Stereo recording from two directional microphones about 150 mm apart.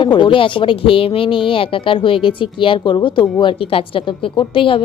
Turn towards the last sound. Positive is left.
turn(degrees=35)  # may be behind; listen again after turning